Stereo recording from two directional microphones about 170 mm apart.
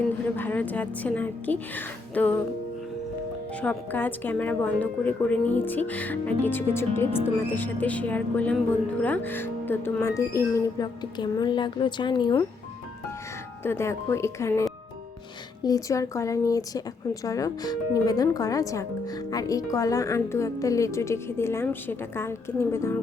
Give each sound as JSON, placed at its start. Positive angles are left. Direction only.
{"t": 0.3, "sound": "a woman's voice", "side_deg": 10}
{"t": 3.6, "sound": "a woman's voice", "side_deg": 10}
{"t": 13.7, "sound": "a woman's voice", "side_deg": 15}